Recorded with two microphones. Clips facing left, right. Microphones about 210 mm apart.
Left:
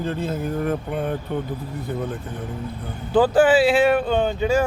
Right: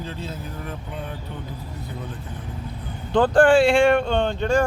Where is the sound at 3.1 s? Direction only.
5° left (ahead or behind).